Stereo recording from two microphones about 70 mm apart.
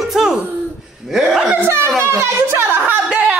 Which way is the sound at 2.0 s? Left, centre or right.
Right.